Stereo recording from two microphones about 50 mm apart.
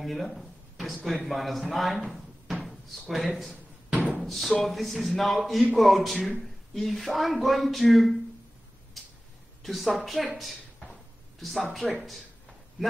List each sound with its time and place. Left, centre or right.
0.0 s speech: centre
1.0 s a man's voice: centre
4.2 s music: centre
4.6 s speech: centre
9.0 s a sound: centre
9.6 s speech: centre
11.8 s speech: left